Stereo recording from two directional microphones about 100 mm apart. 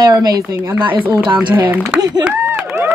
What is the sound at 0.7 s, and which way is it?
Speech, 55° right (ahead or behind).